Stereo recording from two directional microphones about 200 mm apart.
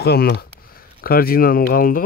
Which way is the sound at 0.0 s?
55° left (ahead or behind).